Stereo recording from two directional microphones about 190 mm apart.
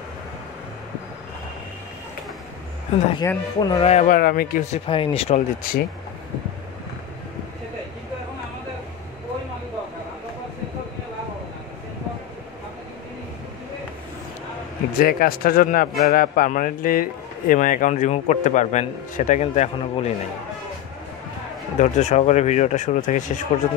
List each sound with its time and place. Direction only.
3.3 s a man's voice: 20° left (ahead or behind)
3.9 s speech: 35° left (ahead or behind)
4.2 s speech: 50° left (ahead or behind)
4.7 s speech: 30° left (ahead or behind)
5.6 s speech: 45° left (ahead or behind)
15.0 s speech: 50° left (ahead or behind)
21.7 s speech: 40° left (ahead or behind)